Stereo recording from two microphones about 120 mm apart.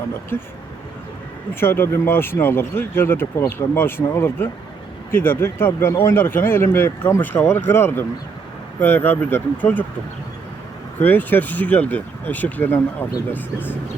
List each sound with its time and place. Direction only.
1.5 s speech: 20° left (ahead or behind)
11.0 s speech: 15° left (ahead or behind)